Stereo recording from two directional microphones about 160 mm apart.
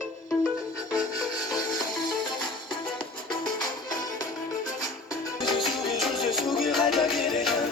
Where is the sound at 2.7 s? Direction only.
30° left (ahead or behind).